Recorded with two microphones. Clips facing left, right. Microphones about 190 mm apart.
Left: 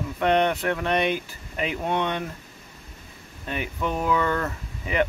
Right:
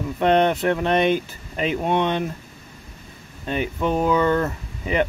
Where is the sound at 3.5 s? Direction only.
25° right (ahead or behind).